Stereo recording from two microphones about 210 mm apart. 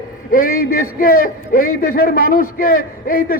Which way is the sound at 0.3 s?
45° left (ahead or behind).